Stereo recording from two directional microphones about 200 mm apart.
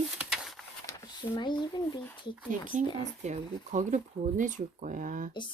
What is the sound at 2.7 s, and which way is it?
Speech, 40° right (ahead or behind).